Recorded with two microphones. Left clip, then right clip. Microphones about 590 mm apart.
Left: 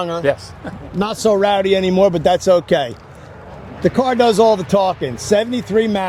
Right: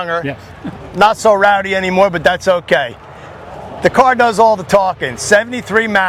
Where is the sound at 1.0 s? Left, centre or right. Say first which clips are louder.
Right 6 dB; right.